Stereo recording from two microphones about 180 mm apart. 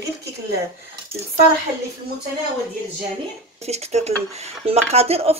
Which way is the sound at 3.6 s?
35° right (ahead or behind).